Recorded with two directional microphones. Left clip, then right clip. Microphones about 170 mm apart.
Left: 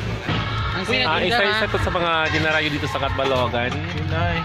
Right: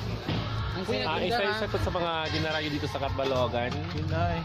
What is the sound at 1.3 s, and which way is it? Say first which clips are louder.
Speech: left 9 dB; 60° right (ahead or behind).